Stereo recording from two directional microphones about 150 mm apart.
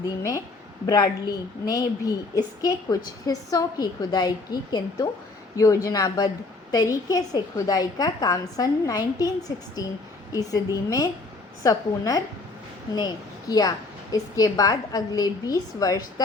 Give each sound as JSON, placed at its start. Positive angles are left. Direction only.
{"t": 0.2, "sound": "a woman's voice", "side_deg": 20}